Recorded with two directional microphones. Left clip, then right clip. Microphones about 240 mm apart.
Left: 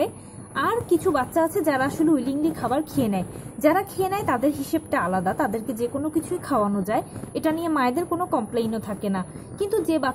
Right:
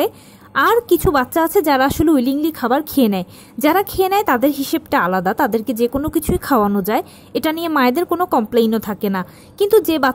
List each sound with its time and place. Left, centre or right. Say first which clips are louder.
0.6 s a woman's voice: right 9 dB; right